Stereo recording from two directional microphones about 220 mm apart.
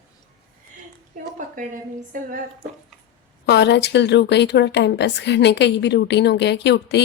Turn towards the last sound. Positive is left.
turn(degrees=50)  # may be behind; listen again after turning